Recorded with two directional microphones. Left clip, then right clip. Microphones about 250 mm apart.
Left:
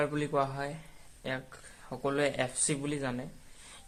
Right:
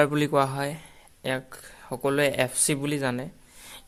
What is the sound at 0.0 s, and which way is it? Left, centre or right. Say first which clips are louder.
Speech: right 8 dB; right.